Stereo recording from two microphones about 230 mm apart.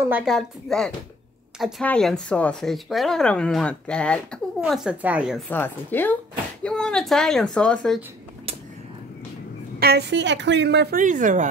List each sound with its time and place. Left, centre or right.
0.0 s speech: centre
5.5 s a woman's voice: centre
9.8 s a woman's voice: right